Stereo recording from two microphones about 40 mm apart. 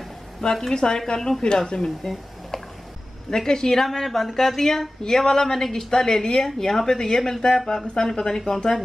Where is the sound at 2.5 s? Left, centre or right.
Centre.